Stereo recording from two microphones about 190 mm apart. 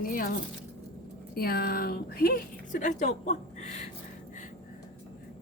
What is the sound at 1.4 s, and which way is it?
A woman's voice, 55° left (ahead or behind).